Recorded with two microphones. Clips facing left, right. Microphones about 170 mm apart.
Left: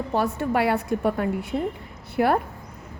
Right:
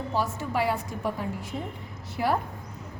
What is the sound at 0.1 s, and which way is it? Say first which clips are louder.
A woman's voice: left 6 dB; 60° left (ahead or behind).